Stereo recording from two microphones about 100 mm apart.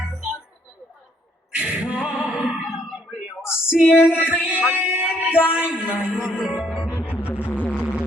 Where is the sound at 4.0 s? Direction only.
20° left (ahead or behind).